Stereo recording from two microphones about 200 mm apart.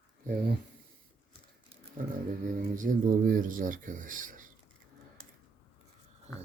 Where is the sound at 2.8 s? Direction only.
40° right (ahead or behind).